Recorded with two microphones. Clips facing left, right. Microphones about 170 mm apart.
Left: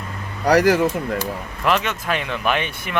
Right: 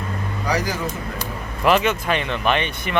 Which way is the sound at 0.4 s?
75° left (ahead or behind).